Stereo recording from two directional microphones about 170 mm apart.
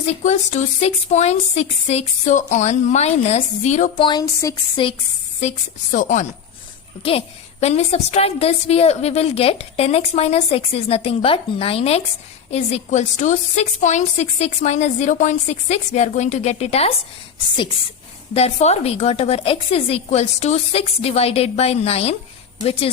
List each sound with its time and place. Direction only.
0.0 s a woman's voice: 40° left (ahead or behind)
3.9 s speech: 25° left (ahead or behind)
5.4 s a woman's voice: 45° left (ahead or behind)
7.0 s a woman's voice: 35° left (ahead or behind)
18.3 s a woman's voice: 40° left (ahead or behind)